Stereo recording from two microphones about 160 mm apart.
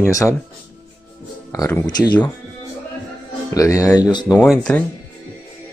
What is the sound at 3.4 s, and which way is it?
Speech, 20° left (ahead or behind).